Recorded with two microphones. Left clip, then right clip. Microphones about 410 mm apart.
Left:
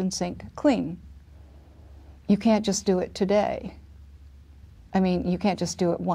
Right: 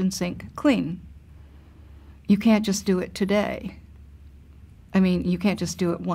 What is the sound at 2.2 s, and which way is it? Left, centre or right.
Speech, left.